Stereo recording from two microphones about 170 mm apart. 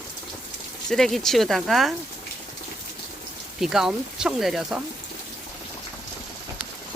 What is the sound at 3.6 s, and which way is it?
Speech, 5° right (ahead or behind).